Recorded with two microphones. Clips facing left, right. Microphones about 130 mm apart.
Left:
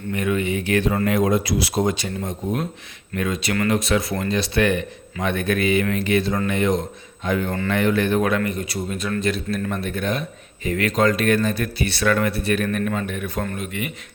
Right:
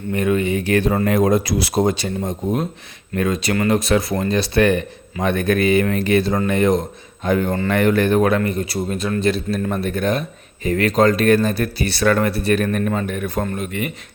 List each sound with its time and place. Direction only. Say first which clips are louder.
0.1 s speech: right 4 dB; 35° right (ahead or behind)
7.7 s speech: right 3 dB; 50° right (ahead or behind)